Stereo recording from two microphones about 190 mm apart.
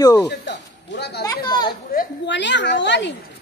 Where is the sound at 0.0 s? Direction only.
20° left (ahead or behind).